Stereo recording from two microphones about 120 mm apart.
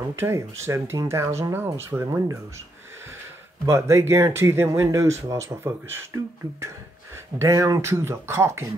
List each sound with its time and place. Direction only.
0.2 s speech: 20° right (ahead or behind)
3.6 s speech: 25° right (ahead or behind)